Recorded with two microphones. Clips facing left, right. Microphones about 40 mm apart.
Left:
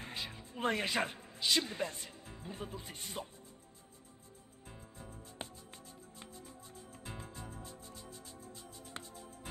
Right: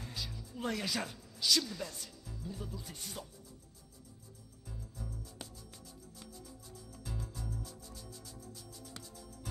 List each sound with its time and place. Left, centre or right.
0.0 s speech: left
4.6 s music: left